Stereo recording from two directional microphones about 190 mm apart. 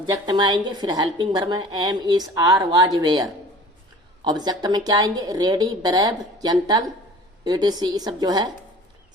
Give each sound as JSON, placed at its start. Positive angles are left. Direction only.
{"t": 0.0, "sound": "a woman's voice", "side_deg": -20}